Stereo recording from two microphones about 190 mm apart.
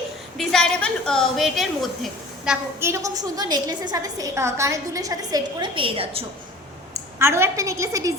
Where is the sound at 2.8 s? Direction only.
15° right (ahead or behind).